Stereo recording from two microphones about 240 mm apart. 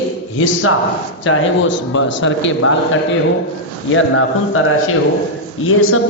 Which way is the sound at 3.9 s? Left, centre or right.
Left.